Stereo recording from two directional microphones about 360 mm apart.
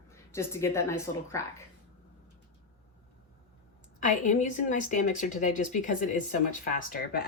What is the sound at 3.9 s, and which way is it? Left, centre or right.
A woman's voice, left.